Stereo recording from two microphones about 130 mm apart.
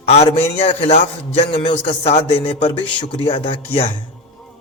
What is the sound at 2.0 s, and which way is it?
A man's voice, 50° left (ahead or behind).